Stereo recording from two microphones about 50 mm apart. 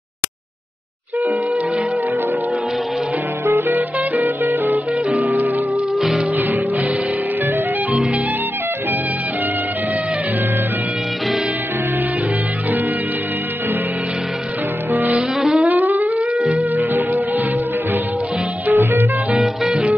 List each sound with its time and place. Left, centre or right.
3.5 s music: right
5.9 s music: centre
14.9 s music: right
18.7 s music: right
19.3 s music: centre